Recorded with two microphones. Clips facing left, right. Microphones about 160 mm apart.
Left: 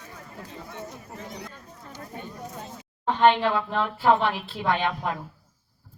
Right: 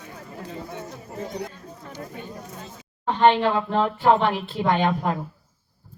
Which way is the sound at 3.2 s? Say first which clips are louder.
Right 2 dB; 35° right (ahead or behind).